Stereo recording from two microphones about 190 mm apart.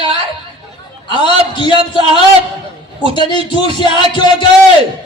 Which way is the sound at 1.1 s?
25° left (ahead or behind).